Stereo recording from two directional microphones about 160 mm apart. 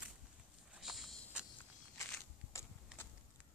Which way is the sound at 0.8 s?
Centre (ahead or behind).